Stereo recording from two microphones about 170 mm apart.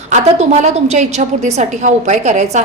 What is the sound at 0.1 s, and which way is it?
A woman's voice, 40° right (ahead or behind).